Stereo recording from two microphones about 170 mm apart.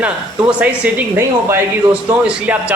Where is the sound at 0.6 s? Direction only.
10° right (ahead or behind).